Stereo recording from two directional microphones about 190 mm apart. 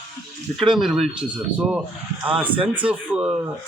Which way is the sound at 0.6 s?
Centre (ahead or behind).